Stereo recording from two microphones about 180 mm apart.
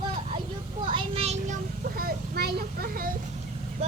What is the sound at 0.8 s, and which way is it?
Speech, 30° right (ahead or behind).